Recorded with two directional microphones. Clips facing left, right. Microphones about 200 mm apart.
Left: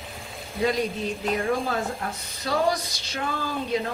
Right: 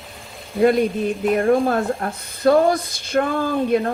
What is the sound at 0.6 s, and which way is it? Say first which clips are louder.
Speech: right 9 dB; 55° right (ahead or behind).